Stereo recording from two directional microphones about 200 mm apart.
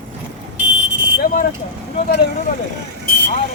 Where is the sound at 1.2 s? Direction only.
45° left (ahead or behind).